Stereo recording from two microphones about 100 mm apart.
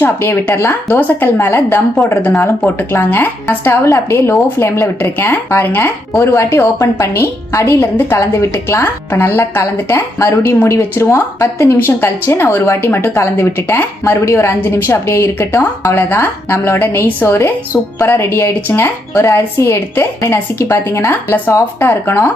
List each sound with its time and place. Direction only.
0.0 s a woman's voice: 20° left (ahead or behind)
2.9 s a woman's voice: 20° left (ahead or behind)